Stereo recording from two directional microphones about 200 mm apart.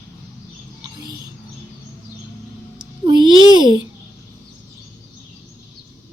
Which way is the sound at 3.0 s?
20° right (ahead or behind).